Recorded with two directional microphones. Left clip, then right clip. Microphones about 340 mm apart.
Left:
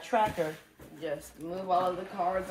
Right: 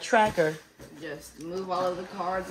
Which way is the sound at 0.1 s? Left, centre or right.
Right.